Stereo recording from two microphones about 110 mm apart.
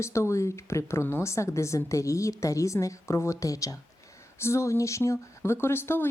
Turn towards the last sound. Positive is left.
turn(degrees=20)  # may be behind; listen again after turning